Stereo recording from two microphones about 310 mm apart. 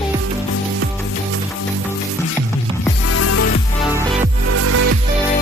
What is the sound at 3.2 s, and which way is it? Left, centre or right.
Music, left.